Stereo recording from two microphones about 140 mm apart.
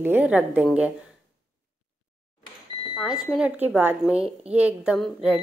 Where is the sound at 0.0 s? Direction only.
10° right (ahead or behind).